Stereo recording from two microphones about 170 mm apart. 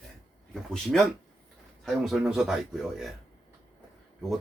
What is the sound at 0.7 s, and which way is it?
Speech, 5° left (ahead or behind).